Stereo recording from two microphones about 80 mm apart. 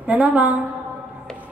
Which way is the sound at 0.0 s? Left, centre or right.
Centre.